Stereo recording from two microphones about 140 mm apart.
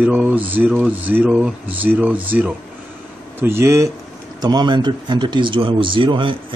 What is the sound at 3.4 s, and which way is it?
Speech, 20° right (ahead or behind).